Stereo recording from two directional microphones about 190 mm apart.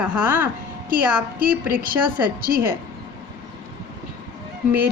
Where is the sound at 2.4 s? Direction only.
50° right (ahead or behind).